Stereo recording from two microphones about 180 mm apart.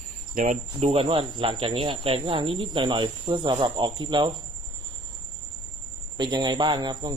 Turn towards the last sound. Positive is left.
turn(degrees=-25)  # may be behind; listen again after turning